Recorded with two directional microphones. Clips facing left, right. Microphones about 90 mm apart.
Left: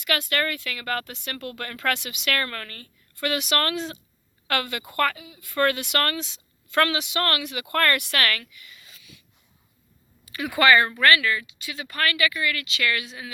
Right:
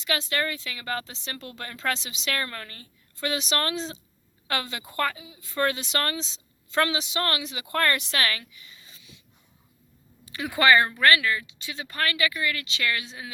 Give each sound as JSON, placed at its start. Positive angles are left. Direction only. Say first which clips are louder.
{"t": 0.0, "sound": "speech", "louder": "left 2 dB", "side_deg": -25}
{"t": 10.2, "sound": "speech", "louder": "left 1 dB", "side_deg": -25}